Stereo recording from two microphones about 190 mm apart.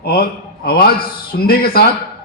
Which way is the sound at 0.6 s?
50° left (ahead or behind).